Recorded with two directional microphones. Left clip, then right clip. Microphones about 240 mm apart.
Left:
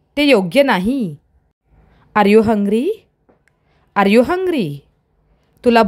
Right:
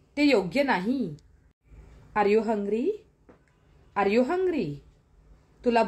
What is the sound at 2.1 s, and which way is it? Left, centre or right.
Speech, left.